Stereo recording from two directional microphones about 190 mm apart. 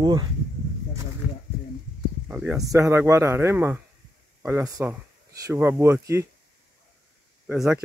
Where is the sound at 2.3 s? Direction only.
10° right (ahead or behind).